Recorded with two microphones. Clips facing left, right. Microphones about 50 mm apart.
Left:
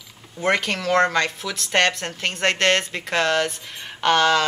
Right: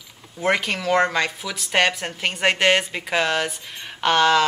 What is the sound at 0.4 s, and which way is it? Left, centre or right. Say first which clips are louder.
Speech: even; centre.